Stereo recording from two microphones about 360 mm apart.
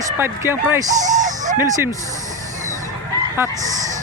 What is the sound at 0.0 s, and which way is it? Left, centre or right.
Speech, centre.